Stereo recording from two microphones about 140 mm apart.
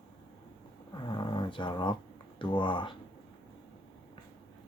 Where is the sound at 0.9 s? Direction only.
35° left (ahead or behind).